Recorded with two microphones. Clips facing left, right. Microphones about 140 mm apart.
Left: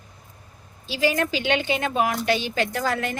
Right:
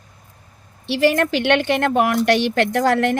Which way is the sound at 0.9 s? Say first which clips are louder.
Right 6 dB; 65° right (ahead or behind).